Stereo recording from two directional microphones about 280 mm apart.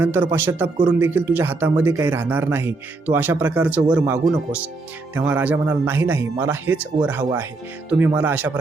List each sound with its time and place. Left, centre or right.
0.0 s speech: centre